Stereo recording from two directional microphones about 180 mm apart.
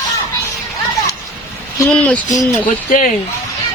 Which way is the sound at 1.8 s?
5° left (ahead or behind).